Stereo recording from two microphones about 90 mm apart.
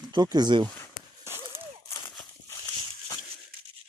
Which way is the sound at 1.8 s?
30° left (ahead or behind).